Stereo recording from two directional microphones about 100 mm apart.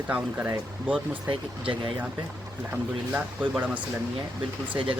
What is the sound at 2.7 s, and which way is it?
Speech, 15° right (ahead or behind).